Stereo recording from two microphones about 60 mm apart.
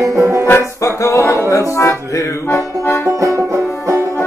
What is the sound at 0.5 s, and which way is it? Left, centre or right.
Music, left.